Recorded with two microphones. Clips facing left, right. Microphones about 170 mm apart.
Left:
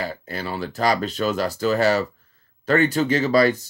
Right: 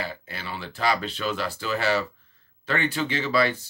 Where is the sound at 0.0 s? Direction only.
40° left (ahead or behind).